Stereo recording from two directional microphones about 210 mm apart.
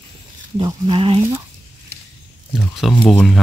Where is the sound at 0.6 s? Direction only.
20° right (ahead or behind).